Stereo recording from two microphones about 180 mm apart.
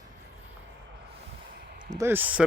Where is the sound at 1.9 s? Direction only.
15° right (ahead or behind).